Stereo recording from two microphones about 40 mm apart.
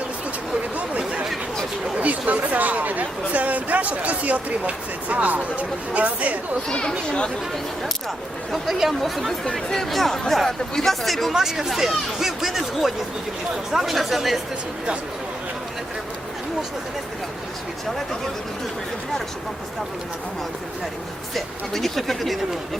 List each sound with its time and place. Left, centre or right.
0.8 s a sound: right
2.0 s speech: right
6.7 s speech: centre
9.0 s speech: centre
11.3 s speech: centre
21.3 s speech: centre